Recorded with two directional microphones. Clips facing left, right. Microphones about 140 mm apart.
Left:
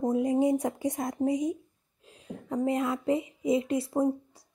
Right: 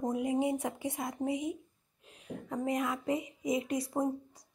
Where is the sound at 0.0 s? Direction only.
35° left (ahead or behind).